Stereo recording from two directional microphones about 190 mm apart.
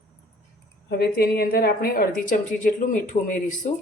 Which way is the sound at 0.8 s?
55° left (ahead or behind).